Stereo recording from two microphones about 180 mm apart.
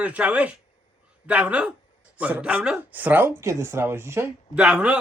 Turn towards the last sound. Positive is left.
turn(degrees=-5)  # may be behind; listen again after turning